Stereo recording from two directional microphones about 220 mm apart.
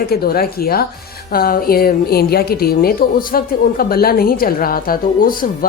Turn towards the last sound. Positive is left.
turn(degrees=40)  # may be behind; listen again after turning